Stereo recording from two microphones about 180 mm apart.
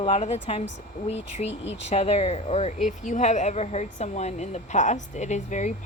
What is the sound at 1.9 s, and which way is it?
A woman's voice, 35° left (ahead or behind).